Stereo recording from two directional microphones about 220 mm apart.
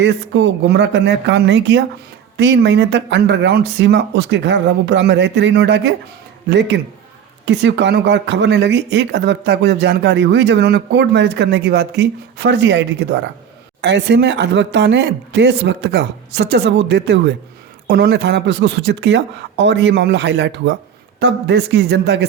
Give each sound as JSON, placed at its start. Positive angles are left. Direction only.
{"t": 0.0, "sound": "speech", "side_deg": -55}